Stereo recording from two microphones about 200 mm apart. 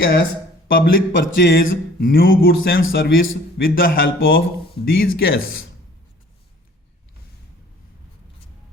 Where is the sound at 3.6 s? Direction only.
60° left (ahead or behind).